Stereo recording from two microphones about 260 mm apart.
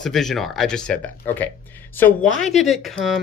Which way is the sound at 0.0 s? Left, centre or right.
Centre.